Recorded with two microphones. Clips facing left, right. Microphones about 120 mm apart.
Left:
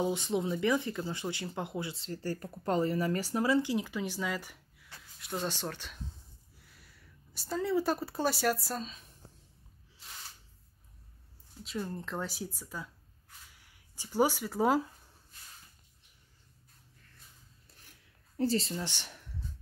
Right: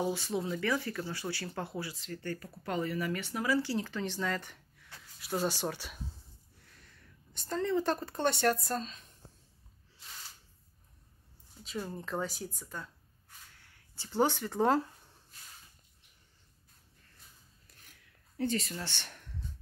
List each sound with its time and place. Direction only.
0.0 s speech: 20° left (ahead or behind)
5.2 s speech: 5° right (ahead or behind)
6.6 s speech: 5° left (ahead or behind)
11.6 s speech: centre (ahead or behind)
13.9 s speech: 10° left (ahead or behind)
18.4 s speech: 30° left (ahead or behind)
18.8 s speech: 15° left (ahead or behind)